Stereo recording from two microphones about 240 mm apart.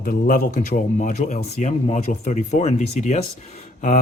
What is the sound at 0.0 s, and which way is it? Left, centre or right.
Speech, left.